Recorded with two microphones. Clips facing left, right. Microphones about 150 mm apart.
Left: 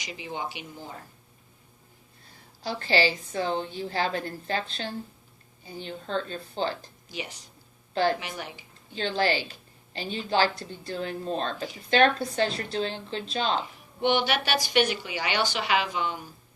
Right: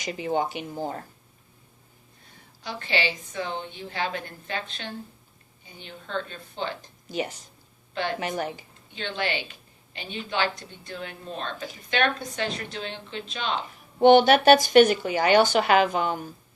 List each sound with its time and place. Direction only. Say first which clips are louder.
0.0 s speech: right 8 dB; 45° right (ahead or behind)
2.6 s a woman's voice: left 4 dB; 35° left (ahead or behind)
8.2 s speech: right 8 dB; 45° right (ahead or behind)
8.9 s a woman's voice: left 4 dB; 35° left (ahead or behind)
14.0 s speech: right 10 dB; 45° right (ahead or behind)